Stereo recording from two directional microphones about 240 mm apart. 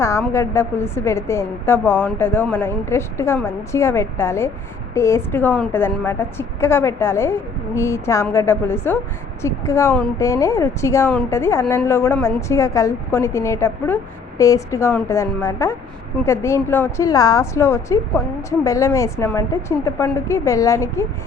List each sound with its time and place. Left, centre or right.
0.0 s a woman's voice: centre